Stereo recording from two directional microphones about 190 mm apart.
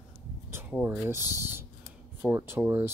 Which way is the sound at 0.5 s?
10° right (ahead or behind).